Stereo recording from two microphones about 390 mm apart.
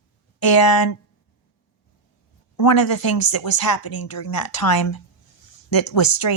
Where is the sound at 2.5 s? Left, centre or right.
Left.